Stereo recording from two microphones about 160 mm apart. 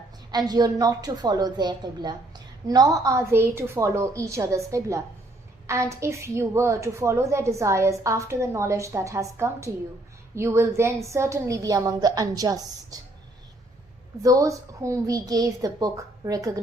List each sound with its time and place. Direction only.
0.3 s a woman's voice: 25° right (ahead or behind)
14.2 s a woman's voice: 20° right (ahead or behind)